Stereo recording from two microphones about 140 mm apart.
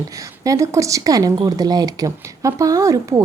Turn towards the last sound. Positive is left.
turn(degrees=-25)  # may be behind; listen again after turning